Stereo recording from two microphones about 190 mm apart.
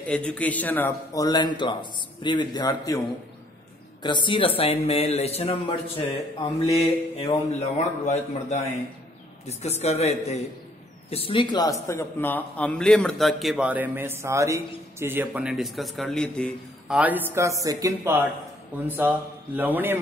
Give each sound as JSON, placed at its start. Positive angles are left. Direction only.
{"t": 0.1, "sound": "a man's voice", "side_deg": 5}
{"t": 4.0, "sound": "a man's voice", "side_deg": 25}
{"t": 11.9, "sound": "a man's voice", "side_deg": 10}